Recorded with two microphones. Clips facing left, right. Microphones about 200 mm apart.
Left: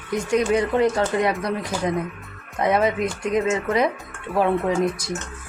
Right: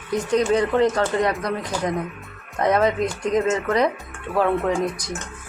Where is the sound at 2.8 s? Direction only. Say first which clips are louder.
Right 1 dB; 5° left (ahead or behind).